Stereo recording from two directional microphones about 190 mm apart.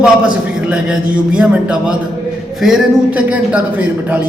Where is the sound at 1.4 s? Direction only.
5° right (ahead or behind).